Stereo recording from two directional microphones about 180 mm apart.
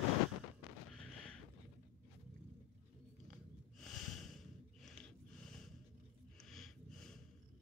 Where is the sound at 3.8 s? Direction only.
Centre (ahead or behind).